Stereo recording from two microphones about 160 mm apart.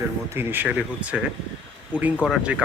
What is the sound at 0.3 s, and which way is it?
Speech, 15° right (ahead or behind).